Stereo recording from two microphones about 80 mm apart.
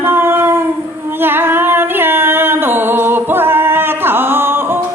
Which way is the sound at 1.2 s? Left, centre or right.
Right.